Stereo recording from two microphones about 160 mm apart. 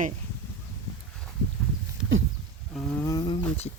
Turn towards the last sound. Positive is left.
turn(degrees=25)  # may be behind; listen again after turning